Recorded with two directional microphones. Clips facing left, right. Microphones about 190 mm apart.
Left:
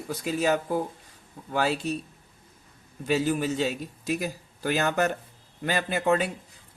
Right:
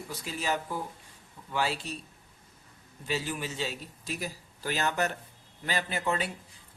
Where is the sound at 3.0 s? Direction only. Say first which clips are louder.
Left 9 dB; 45° left (ahead or behind).